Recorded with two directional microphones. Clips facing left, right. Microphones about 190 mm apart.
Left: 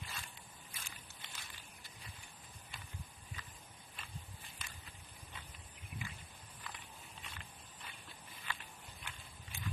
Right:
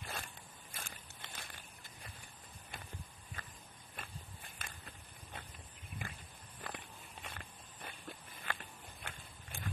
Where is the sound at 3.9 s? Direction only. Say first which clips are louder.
Right 3 dB; 50° right (ahead or behind).